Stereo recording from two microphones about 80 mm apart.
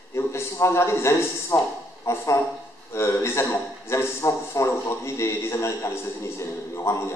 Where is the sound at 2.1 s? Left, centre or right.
Left.